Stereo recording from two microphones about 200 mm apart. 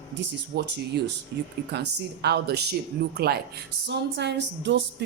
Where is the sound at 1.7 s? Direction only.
55° right (ahead or behind).